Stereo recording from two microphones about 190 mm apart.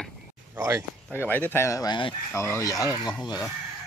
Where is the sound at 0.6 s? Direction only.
15° right (ahead or behind).